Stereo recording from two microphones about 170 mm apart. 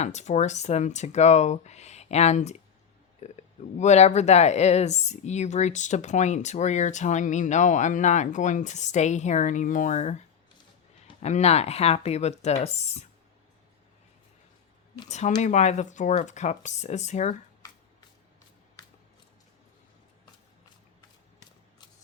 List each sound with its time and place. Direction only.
0.0 s speech: 40° left (ahead or behind)
11.2 s speech: 40° left (ahead or behind)
15.0 s speech: 40° left (ahead or behind)